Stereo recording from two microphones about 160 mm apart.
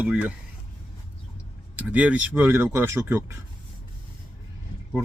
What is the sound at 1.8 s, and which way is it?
Speech, 10° right (ahead or behind).